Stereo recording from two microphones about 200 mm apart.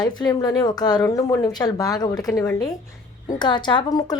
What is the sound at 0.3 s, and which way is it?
A woman's voice, 20° left (ahead or behind).